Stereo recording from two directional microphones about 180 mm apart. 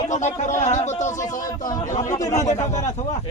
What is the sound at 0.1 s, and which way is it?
Speech, 40° left (ahead or behind).